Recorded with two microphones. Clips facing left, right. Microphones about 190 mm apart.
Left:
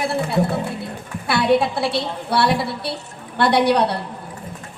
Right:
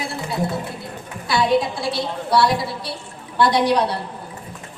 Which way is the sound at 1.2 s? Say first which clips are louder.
Left 1 dB; 60° left (ahead or behind).